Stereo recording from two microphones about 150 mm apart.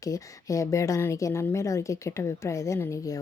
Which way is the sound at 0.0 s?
20° left (ahead or behind).